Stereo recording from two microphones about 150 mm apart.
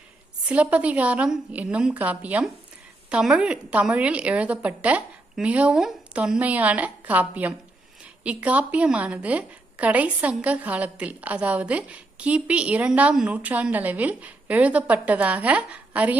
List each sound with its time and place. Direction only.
0.4 s a woman's voice: 10° right (ahead or behind)